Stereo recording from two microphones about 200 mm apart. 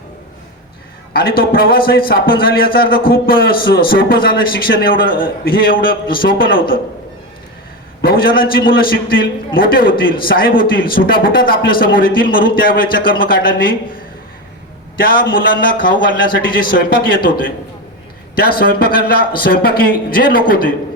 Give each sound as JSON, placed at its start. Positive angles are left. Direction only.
{"t": 1.4, "sound": "a man's voice", "side_deg": 50}
{"t": 8.0, "sound": "a man's voice", "side_deg": 45}
{"t": 14.9, "sound": "a man's voice", "side_deg": 45}